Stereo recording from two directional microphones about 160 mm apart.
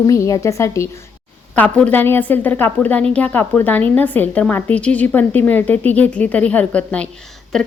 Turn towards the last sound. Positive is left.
turn(degrees=0)  # may be behind; listen again after turning